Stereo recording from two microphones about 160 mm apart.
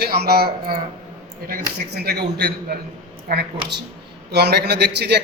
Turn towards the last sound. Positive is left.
turn(degrees=-90)